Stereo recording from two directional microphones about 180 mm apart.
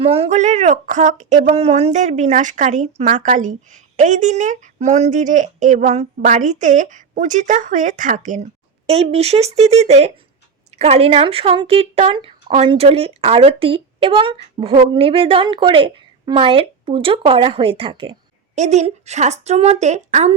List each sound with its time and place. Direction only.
0.0 s speech: 35° right (ahead or behind)
8.9 s speech: 35° right (ahead or behind)